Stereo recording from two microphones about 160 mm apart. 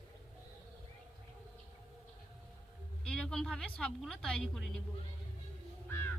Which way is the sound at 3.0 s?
5° left (ahead or behind).